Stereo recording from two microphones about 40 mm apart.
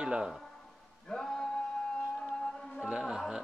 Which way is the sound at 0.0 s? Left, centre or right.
Right.